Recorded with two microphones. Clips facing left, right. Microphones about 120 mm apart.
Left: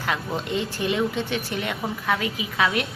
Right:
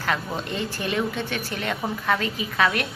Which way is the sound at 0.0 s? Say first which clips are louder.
Even; 15° left (ahead or behind).